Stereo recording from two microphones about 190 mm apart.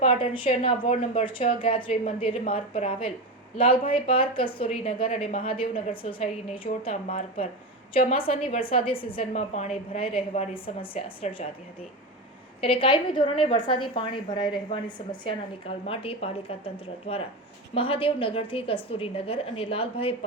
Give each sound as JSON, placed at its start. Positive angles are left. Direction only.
{"t": 0.0, "sound": "a woman's voice", "side_deg": 30}
{"t": 12.6, "sound": "a woman's voice", "side_deg": 30}